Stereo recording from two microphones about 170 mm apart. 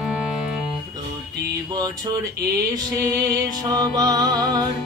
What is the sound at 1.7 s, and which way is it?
Music, 25° right (ahead or behind).